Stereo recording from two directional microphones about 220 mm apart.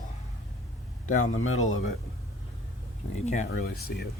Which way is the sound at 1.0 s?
35° left (ahead or behind).